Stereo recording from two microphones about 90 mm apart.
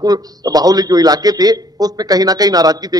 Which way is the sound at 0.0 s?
45° right (ahead or behind).